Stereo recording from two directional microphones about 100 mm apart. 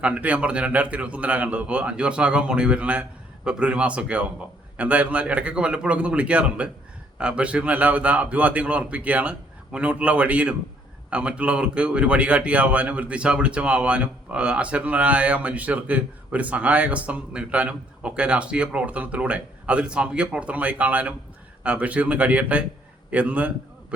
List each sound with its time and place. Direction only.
0.0 s speech: 15° right (ahead or behind)